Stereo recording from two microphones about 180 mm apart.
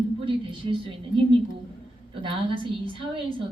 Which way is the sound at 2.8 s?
30° right (ahead or behind).